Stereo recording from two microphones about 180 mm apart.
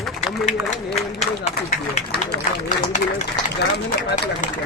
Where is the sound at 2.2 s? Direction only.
40° left (ahead or behind).